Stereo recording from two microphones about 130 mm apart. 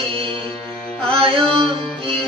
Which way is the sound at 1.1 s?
45° right (ahead or behind).